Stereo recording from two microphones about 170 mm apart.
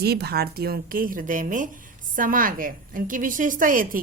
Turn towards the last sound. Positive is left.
turn(degrees=-50)  # may be behind; listen again after turning